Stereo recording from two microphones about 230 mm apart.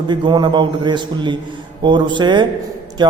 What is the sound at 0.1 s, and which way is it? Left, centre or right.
A man's voice, centre.